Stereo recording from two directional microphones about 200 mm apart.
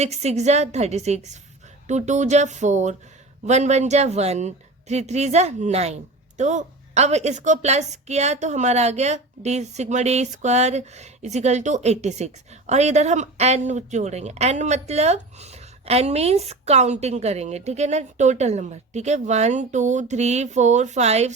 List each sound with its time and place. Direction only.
0.0 s speech: 35° right (ahead or behind)